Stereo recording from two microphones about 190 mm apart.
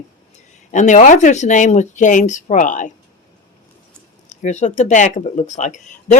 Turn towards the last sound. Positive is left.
turn(degrees=40)  # may be behind; listen again after turning